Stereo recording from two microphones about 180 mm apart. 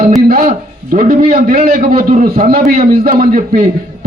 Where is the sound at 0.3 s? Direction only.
50° right (ahead or behind).